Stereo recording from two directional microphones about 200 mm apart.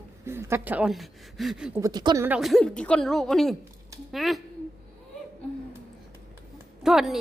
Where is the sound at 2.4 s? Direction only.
Centre (ahead or behind).